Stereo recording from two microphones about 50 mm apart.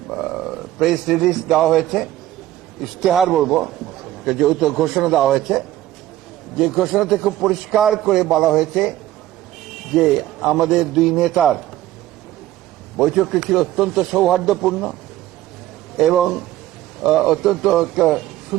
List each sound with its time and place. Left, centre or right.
0.1 s a man's voice: centre
13.0 s a man's voice: centre
16.0 s a man's voice: centre